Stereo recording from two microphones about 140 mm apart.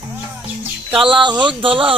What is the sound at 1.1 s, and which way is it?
Speech, 35° right (ahead or behind).